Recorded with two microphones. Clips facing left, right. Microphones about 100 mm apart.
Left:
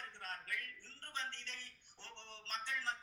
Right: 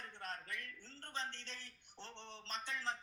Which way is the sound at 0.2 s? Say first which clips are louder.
Even; 25° right (ahead or behind).